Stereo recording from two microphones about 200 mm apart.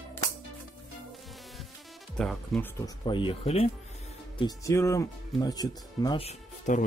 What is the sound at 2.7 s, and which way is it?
Speech, 20° left (ahead or behind).